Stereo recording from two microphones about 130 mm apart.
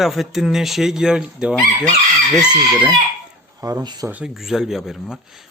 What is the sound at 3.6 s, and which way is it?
Speech, 25° right (ahead or behind).